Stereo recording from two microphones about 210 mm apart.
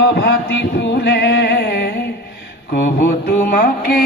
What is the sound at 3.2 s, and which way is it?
Music, 45° left (ahead or behind).